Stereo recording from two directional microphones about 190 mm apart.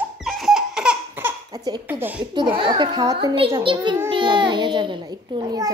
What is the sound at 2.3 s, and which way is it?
A child's voice, 25° right (ahead or behind).